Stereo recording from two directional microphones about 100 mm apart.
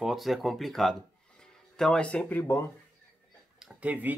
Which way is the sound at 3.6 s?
15° right (ahead or behind).